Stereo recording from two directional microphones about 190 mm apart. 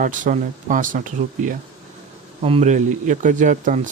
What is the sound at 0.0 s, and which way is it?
Speech, 45° right (ahead or behind).